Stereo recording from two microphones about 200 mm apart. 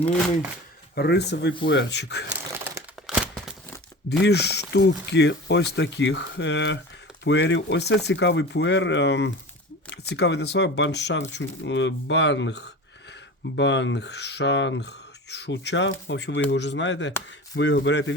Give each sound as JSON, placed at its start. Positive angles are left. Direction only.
{"t": 0.9, "sound": "speech", "side_deg": 55}
{"t": 3.1, "sound": "a sound", "side_deg": 0}
{"t": 4.2, "sound": "speech", "side_deg": 55}